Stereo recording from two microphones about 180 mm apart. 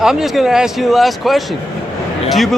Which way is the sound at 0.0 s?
5° right (ahead or behind).